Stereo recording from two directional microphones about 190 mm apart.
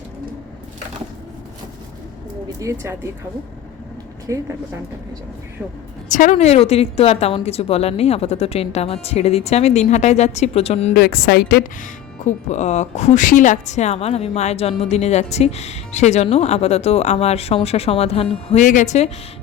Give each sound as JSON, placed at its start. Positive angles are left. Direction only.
{"t": 2.6, "sound": "speech", "side_deg": -15}
{"t": 4.3, "sound": "speech", "side_deg": -15}
{"t": 6.1, "sound": "speech", "side_deg": 45}
{"t": 10.9, "sound": "speech", "side_deg": 55}